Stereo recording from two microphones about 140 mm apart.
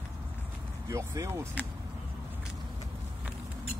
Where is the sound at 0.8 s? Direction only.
25° right (ahead or behind).